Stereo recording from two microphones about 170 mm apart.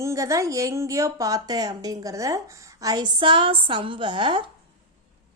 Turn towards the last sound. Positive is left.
turn(degrees=-30)  # may be behind; listen again after turning